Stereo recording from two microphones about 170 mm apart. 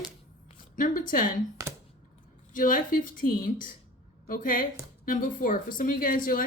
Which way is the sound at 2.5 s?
55° left (ahead or behind).